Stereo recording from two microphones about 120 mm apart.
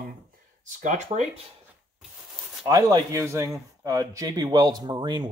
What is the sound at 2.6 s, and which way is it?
Speech, 30° right (ahead or behind).